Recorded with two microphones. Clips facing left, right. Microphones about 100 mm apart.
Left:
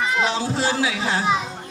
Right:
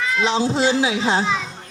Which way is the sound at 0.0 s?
20° left (ahead or behind).